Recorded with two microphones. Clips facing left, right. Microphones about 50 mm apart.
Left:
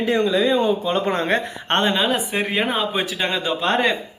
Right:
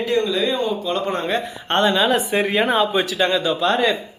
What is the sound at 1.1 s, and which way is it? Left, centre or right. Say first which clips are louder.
Speech: left 2 dB; left.